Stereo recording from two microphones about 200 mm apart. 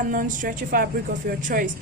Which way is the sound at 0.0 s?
40° right (ahead or behind).